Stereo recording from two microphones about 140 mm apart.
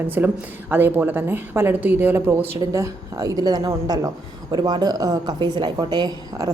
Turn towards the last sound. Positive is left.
turn(degrees=-30)  # may be behind; listen again after turning